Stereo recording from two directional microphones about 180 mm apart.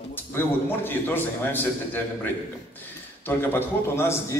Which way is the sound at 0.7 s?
10° left (ahead or behind).